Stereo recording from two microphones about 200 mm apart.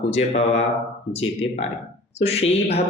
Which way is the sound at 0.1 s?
35° left (ahead or behind).